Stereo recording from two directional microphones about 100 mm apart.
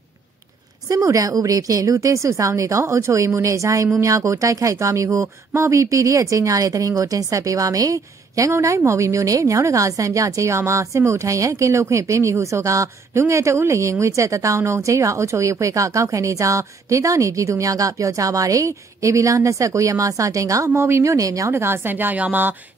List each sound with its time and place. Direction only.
0.8 s a woman's voice: 35° right (ahead or behind); by 22.5 s 15° right (ahead or behind)